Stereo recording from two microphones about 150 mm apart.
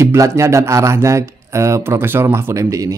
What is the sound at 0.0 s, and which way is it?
Speech, 20° right (ahead or behind).